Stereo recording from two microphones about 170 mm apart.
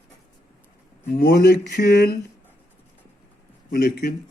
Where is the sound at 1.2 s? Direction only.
65° left (ahead or behind).